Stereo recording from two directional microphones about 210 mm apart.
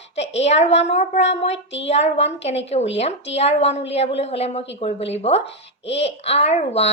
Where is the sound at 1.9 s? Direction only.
30° left (ahead or behind).